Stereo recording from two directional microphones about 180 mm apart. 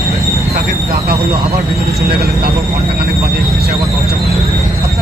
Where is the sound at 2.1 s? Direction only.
60° right (ahead or behind).